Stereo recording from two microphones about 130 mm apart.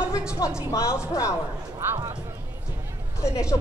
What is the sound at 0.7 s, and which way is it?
Speech, 25° left (ahead or behind).